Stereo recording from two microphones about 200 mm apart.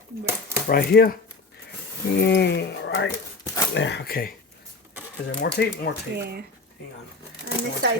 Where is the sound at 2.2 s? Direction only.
55° left (ahead or behind).